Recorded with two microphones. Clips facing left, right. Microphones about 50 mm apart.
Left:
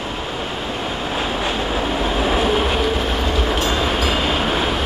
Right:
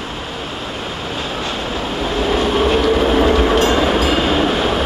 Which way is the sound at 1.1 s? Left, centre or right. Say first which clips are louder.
Left 2 dB; centre.